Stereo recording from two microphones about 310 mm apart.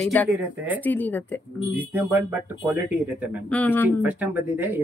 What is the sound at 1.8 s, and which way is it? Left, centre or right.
Speech, centre.